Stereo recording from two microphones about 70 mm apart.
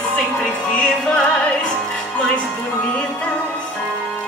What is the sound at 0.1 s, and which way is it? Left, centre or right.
Music, centre.